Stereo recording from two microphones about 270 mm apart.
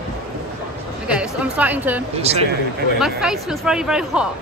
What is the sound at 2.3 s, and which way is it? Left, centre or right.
Speech, right.